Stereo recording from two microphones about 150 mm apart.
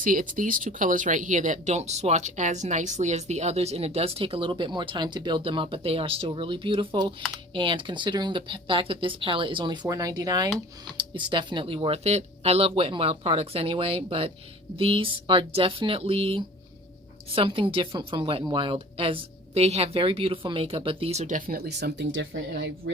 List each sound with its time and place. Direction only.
0.0 s speech: 65° right (ahead or behind); by 21.9 s 90° right